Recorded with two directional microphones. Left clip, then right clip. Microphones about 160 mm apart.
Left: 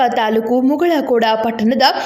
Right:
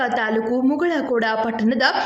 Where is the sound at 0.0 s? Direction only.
25° left (ahead or behind).